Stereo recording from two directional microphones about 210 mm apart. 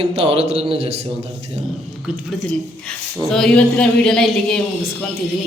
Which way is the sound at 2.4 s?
5° left (ahead or behind).